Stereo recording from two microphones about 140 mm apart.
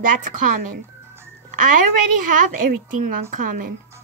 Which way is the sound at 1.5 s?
75° right (ahead or behind).